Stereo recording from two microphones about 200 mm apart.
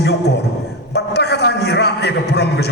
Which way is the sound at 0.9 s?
55° left (ahead or behind).